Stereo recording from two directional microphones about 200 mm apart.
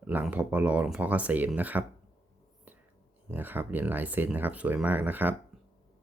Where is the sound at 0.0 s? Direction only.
10° right (ahead or behind).